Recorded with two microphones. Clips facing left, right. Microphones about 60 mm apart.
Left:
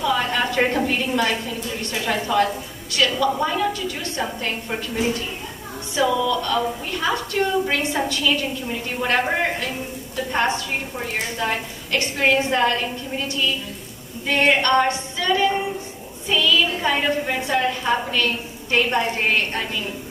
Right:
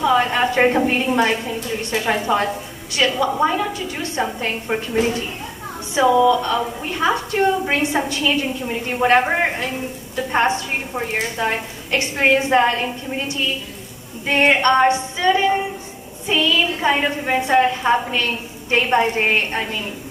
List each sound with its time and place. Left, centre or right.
0.0 s a woman's voice: right
5.9 s a woman's voice: right
11.3 s a woman's voice: right
14.2 s a woman's voice: right